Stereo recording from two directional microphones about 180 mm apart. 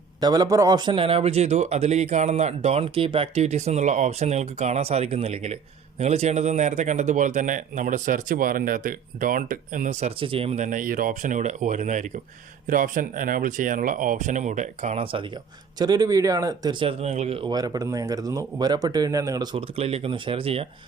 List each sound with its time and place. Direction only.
0.2 s speech: 20° right (ahead or behind)